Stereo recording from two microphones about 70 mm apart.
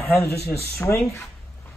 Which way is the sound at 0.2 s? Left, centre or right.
Left.